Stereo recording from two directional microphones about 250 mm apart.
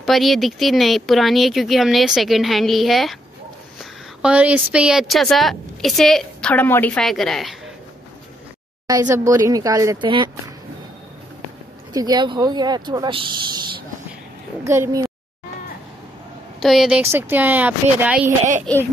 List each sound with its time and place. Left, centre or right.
0.0 s a woman's voice: centre
4.2 s a woman's voice: centre
8.8 s speech: centre
11.9 s speech: centre
16.6 s speech: centre